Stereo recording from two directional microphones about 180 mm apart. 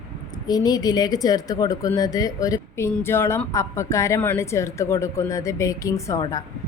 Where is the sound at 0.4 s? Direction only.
20° left (ahead or behind).